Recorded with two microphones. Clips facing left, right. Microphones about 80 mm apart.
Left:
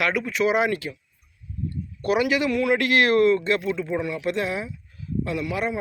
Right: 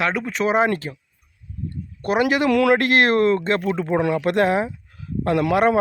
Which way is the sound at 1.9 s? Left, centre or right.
Right.